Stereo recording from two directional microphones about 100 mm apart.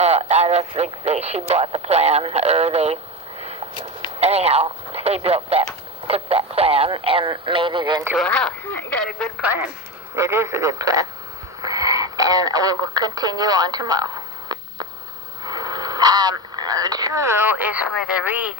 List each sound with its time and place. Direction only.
0.0 s speech: 90° right
4.2 s speech: 90° right; by 7.3 s 70° right (ahead or behind)
7.3 s speech: 55° right (ahead or behind)
8.2 s speech: 5° left (ahead or behind)
9.4 s a woman's voice: 20° right (ahead or behind)